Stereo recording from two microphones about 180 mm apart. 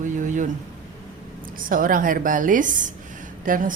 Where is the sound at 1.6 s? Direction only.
50° right (ahead or behind).